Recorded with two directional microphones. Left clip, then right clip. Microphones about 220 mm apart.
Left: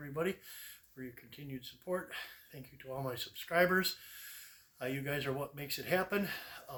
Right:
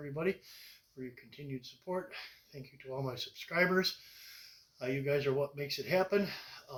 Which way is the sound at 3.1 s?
20° left (ahead or behind).